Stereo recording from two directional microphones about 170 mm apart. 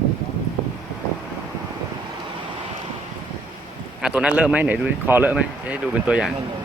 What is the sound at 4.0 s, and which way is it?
A man's voice, 5° right (ahead or behind).